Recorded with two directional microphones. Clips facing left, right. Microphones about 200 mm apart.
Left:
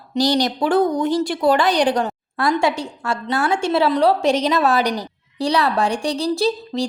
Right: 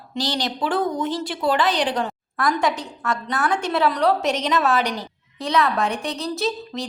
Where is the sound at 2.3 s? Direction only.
30° left (ahead or behind).